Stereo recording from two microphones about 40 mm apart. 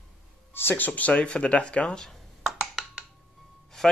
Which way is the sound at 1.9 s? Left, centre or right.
Centre.